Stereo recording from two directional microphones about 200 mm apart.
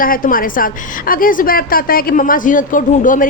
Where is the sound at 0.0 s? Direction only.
45° left (ahead or behind).